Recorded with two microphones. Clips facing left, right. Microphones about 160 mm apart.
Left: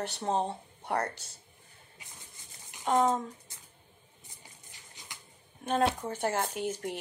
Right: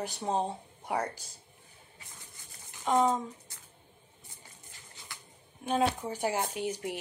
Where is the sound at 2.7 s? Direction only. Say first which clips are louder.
Even; 15° left (ahead or behind).